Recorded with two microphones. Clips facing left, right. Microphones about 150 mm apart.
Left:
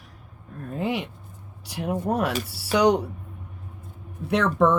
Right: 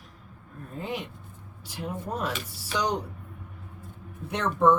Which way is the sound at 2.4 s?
75° left (ahead or behind).